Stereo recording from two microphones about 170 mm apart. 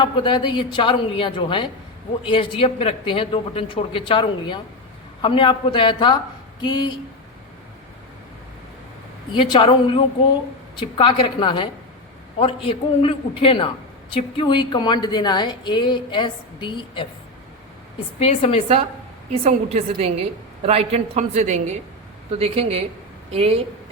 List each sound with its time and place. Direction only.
0.0 s a woman's voice: 30° left (ahead or behind)
9.3 s a woman's voice: 30° left (ahead or behind)
18.2 s a man's voice: 35° left (ahead or behind)
19.5 s a woman's voice: 35° right (ahead or behind)